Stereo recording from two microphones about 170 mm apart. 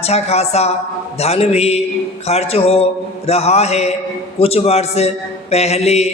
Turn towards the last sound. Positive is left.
turn(degrees=40)  # may be behind; listen again after turning